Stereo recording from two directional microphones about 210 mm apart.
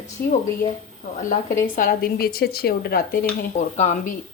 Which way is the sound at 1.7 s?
40° left (ahead or behind).